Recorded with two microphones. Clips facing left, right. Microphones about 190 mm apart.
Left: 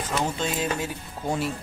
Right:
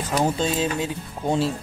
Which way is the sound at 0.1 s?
30° right (ahead or behind).